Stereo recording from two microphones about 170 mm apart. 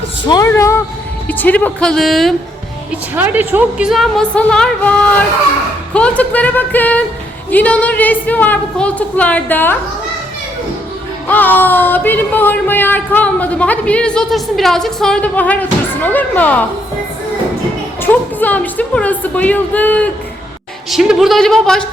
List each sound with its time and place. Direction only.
0.3 s a woman's voice: 20° left (ahead or behind); by 2.3 s centre (ahead or behind)
2.9 s a woman's voice: 10° right (ahead or behind); by 9.7 s 10° left (ahead or behind)
11.3 s speech: 10° left (ahead or behind)
18.0 s speech: 10° left (ahead or behind)
20.9 s a woman's voice: centre (ahead or behind)